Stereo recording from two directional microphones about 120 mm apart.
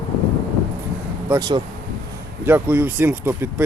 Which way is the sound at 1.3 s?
40° right (ahead or behind).